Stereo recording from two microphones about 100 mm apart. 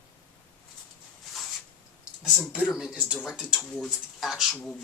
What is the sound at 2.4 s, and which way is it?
Speech, 15° left (ahead or behind).